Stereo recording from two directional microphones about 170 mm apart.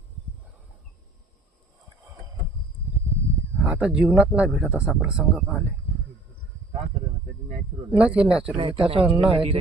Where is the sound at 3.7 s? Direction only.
5° right (ahead or behind).